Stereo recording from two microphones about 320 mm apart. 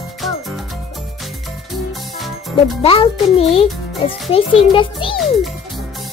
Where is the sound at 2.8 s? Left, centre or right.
Centre.